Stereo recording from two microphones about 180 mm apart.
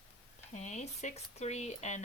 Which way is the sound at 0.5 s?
40° left (ahead or behind).